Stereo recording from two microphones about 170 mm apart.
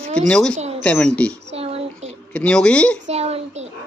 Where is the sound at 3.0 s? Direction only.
40° right (ahead or behind).